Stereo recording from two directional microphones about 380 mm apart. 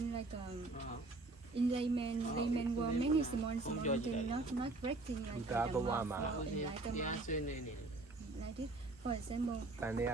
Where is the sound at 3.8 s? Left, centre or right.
Centre.